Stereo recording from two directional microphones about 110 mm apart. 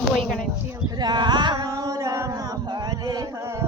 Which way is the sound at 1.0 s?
40° right (ahead or behind).